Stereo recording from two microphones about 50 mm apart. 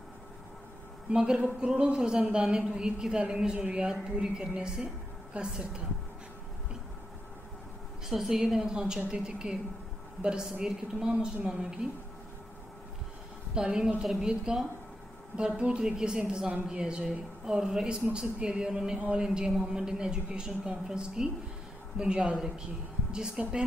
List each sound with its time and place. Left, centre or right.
1.1 s a woman's voice: centre
8.1 s a woman's voice: centre
13.6 s a woman's voice: centre